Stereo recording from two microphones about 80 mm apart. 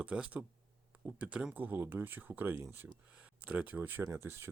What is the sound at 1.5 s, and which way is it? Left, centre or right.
Speech, right.